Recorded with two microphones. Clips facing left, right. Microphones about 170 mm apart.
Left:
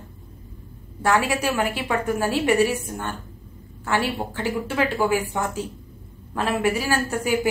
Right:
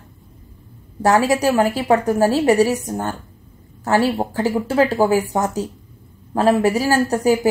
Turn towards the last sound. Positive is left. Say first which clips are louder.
# right 8 dB
turn(degrees=-40)  # may be behind; listen again after turning